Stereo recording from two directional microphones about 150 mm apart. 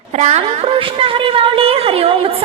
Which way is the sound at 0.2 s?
50° right (ahead or behind).